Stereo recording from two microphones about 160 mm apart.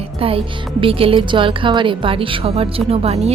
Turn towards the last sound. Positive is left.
turn(degrees=-40)  # may be behind; listen again after turning